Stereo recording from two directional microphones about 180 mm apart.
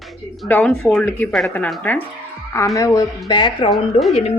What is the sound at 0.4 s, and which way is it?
A woman's voice, 5° left (ahead or behind).